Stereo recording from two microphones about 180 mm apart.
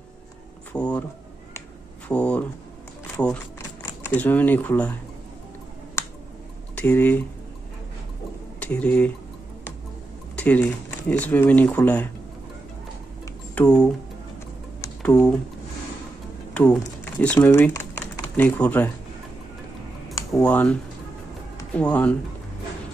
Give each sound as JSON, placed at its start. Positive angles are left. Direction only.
{"t": 0.7, "sound": "a sound", "side_deg": 5}
{"t": 2.0, "sound": "a sound", "side_deg": 5}
{"t": 3.2, "sound": "music", "side_deg": 5}
{"t": 4.1, "sound": "speech", "side_deg": 10}
{"t": 6.0, "sound": "finger snapping", "side_deg": 15}
{"t": 6.7, "sound": "speech", "side_deg": 10}
{"t": 8.5, "sound": "speech", "side_deg": 5}
{"t": 10.3, "sound": "speech", "side_deg": 10}
{"t": 13.6, "sound": "speech", "side_deg": 5}
{"t": 14.8, "sound": "a sound", "side_deg": 5}
{"t": 16.5, "sound": "speech", "side_deg": 5}
{"t": 20.3, "sound": "speech", "side_deg": 10}
{"t": 21.7, "sound": "speech", "side_deg": 5}